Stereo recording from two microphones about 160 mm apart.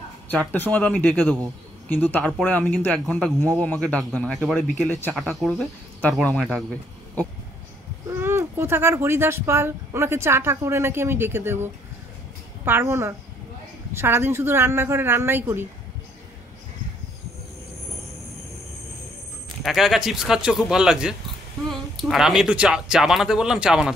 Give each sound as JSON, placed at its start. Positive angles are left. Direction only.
{"t": 0.3, "sound": "a man's voice", "side_deg": 10}
{"t": 8.1, "sound": "speech", "side_deg": -15}
{"t": 19.6, "sound": "speech", "side_deg": 0}